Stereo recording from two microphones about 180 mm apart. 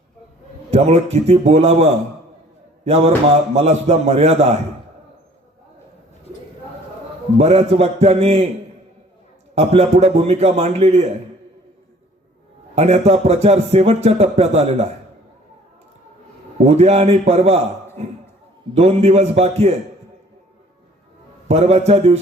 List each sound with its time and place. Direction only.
0.7 s a man's voice: 35° right (ahead or behind)
7.3 s speech: 35° right (ahead or behind)
9.6 s speech: 35° right (ahead or behind)
12.7 s speech: 35° right (ahead or behind)
16.6 s speech: 35° right (ahead or behind)
18.7 s speech: 35° right (ahead or behind)
21.4 s speech: 35° right (ahead or behind)